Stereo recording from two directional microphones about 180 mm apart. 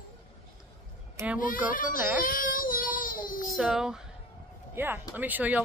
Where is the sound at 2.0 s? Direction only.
10° right (ahead or behind).